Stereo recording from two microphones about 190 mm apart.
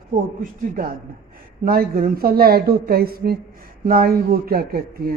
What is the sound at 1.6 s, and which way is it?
A man's voice, 50° right (ahead or behind).